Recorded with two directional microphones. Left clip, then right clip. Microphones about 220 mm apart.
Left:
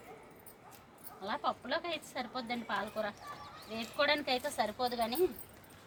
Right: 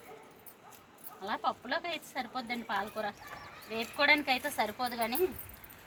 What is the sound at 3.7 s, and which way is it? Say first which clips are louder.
A woman's voice: right 5 dB; 25° left (ahead or behind).